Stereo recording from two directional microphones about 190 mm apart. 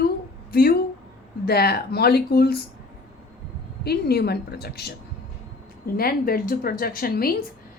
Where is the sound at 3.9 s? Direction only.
55° left (ahead or behind).